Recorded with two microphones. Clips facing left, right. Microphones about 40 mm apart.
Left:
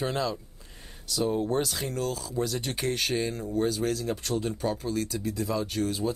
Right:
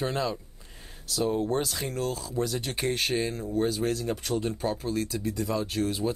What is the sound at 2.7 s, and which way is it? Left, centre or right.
Speech, centre.